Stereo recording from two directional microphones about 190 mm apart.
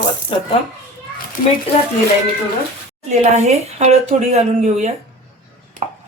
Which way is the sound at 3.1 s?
35° right (ahead or behind).